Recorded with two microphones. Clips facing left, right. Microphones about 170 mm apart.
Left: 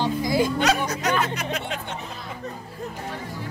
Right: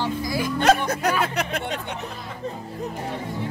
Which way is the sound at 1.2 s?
60° right (ahead or behind).